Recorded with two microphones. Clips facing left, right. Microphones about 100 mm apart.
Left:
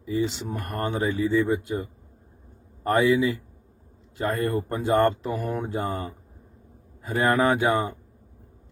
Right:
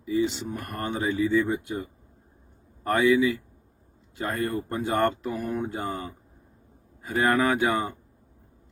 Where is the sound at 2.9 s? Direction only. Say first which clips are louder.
Even; 30° left (ahead or behind).